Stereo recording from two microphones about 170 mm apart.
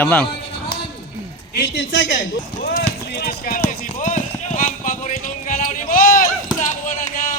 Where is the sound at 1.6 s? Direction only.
90° left.